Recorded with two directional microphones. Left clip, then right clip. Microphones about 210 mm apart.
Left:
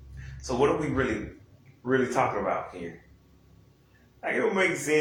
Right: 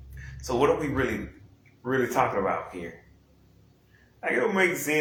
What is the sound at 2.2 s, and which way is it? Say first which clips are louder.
Speech: right 3 dB; 45° right (ahead or behind).